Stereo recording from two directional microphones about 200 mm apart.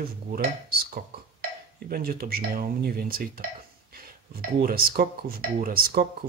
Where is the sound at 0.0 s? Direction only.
45° right (ahead or behind).